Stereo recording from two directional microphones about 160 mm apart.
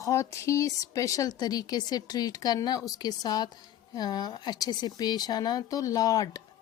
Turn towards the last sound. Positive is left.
turn(degrees=20)  # may be behind; listen again after turning